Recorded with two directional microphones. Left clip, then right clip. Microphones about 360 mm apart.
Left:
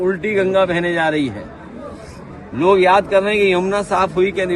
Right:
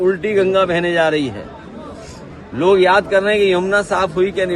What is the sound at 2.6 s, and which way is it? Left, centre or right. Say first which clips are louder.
Speech: even; centre.